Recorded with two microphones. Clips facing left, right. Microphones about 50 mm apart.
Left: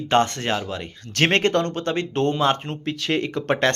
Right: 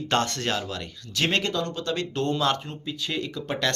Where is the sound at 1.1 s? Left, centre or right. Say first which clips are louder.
Left 6 dB; left.